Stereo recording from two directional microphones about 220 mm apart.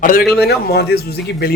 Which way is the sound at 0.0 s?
40° left (ahead or behind).